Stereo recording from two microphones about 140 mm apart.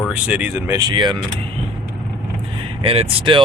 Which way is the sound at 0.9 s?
35° right (ahead or behind).